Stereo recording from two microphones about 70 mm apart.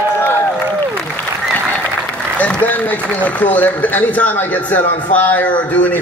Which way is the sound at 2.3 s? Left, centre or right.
Left.